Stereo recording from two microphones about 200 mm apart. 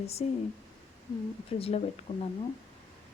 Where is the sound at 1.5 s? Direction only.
30° left (ahead or behind).